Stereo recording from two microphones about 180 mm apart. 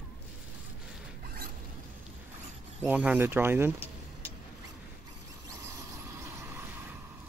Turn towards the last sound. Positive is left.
turn(degrees=-15)  # may be behind; listen again after turning